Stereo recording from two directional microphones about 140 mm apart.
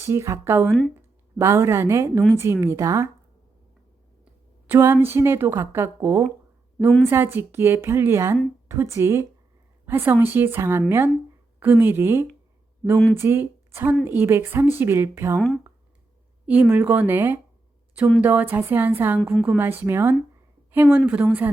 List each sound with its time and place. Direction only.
0.0 s a woman's voice: 20° right (ahead or behind)
4.6 s a woman's voice: 15° right (ahead or behind)
15.4 s speech: 5° left (ahead or behind)
16.5 s speech: 10° right (ahead or behind)